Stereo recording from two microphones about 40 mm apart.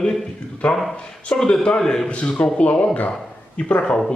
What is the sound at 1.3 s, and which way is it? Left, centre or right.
Speech, centre.